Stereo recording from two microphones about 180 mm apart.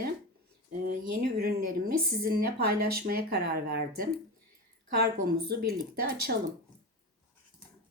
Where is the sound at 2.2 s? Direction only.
55° right (ahead or behind).